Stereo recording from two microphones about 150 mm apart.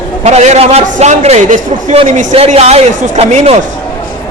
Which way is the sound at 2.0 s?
45° right (ahead or behind).